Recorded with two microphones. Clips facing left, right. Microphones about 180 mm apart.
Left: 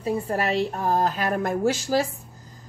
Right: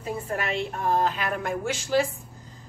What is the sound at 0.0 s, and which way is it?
A woman's voice, 35° left (ahead or behind).